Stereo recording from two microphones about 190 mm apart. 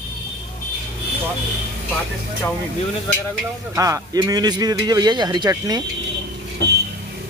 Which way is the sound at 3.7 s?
15° right (ahead or behind).